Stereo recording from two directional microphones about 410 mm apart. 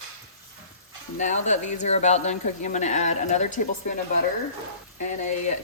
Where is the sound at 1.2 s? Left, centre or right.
Centre.